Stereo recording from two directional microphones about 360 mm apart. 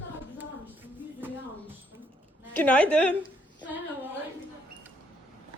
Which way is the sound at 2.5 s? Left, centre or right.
Centre.